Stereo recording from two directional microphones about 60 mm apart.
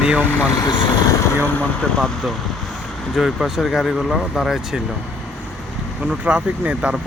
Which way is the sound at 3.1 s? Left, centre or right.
Centre.